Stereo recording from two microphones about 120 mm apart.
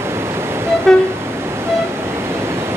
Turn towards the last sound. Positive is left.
turn(degrees=5)  # may be behind; listen again after turning